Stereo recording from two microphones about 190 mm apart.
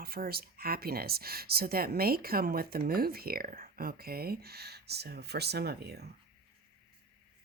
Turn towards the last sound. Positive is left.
turn(degrees=-60)  # may be behind; listen again after turning